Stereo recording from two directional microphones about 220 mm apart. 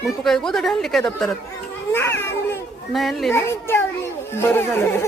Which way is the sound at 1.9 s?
10° left (ahead or behind).